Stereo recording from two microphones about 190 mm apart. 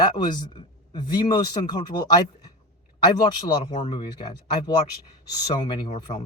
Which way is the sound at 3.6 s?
35° left (ahead or behind).